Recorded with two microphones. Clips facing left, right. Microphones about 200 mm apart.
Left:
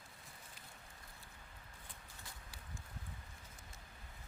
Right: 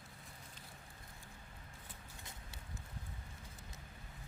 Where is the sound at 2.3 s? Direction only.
20° right (ahead or behind).